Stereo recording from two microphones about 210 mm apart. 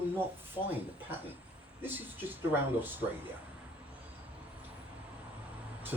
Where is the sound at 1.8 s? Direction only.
10° right (ahead or behind).